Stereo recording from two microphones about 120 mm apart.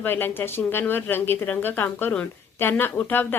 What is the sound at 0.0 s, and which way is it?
Speech, 15° left (ahead or behind).